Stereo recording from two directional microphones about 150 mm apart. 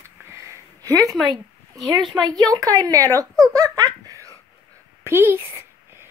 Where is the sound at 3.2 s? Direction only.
20° right (ahead or behind).